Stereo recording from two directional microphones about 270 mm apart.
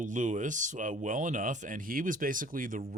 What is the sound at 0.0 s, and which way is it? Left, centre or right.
Speech, right.